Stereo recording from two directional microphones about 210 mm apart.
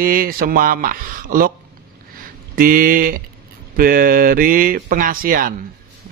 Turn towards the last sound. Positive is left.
turn(degrees=-40)  # may be behind; listen again after turning